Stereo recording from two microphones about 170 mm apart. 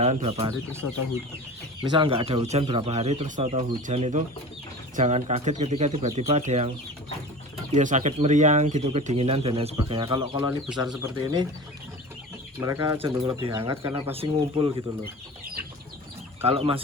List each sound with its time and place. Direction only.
0.0 s speech: 40° right (ahead or behind)
0.4 s speech: 15° right (ahead or behind)
1.9 s speech: 30° right (ahead or behind)
7.7 s speech: 45° right (ahead or behind); by 11.4 s 20° right (ahead or behind)
12.5 s speech: 15° right (ahead or behind); by 14.7 s 35° right (ahead or behind)
16.4 s speech: 35° right (ahead or behind)